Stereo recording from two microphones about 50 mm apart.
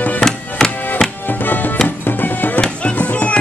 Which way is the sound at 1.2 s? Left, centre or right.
Left.